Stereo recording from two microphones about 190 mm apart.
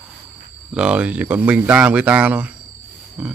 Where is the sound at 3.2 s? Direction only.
5° right (ahead or behind).